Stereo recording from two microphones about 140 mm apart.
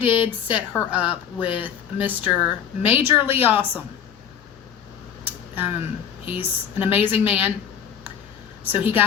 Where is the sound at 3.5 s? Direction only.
10° right (ahead or behind).